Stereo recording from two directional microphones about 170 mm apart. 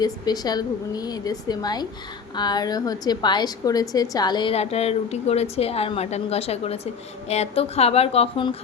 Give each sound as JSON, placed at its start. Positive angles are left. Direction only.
{"t": 0.0, "sound": "a woman's voice", "side_deg": 25}